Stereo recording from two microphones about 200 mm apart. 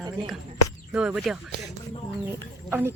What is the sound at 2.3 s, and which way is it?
Chicken, 10° right (ahead or behind).